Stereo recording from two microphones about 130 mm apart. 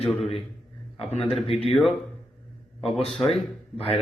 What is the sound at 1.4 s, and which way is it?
Speech, 50° left (ahead or behind).